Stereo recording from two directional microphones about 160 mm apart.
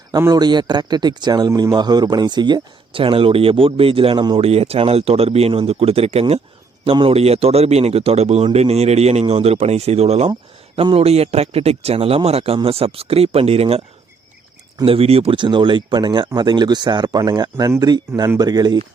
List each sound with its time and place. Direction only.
0.1 s speech: 25° right (ahead or behind)
14.8 s speech: 35° right (ahead or behind)